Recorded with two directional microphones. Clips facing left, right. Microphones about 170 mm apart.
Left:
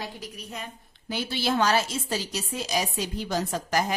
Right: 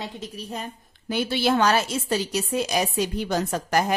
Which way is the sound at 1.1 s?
60° right (ahead or behind).